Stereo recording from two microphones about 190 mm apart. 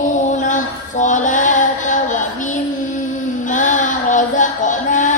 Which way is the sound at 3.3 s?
40° left (ahead or behind).